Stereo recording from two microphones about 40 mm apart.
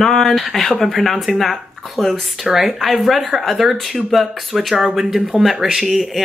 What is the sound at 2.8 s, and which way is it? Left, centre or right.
Speech, centre.